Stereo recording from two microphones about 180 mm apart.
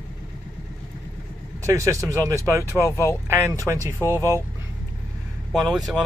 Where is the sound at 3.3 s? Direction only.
15° right (ahead or behind).